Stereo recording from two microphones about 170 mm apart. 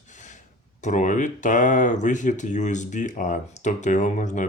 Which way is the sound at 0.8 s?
45° left (ahead or behind).